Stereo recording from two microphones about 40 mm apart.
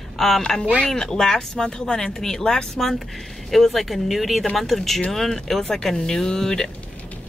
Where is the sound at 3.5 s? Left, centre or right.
Centre.